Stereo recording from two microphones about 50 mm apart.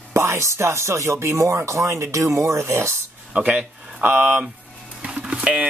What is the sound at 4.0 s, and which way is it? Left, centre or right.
Speech, right.